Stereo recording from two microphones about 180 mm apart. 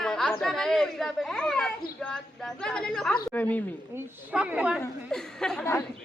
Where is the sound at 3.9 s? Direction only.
5° right (ahead or behind).